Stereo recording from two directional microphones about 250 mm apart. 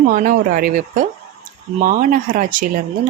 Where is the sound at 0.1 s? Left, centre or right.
Right.